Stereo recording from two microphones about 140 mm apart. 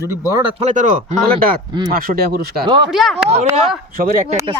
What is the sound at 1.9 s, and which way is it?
Speech, 90° right.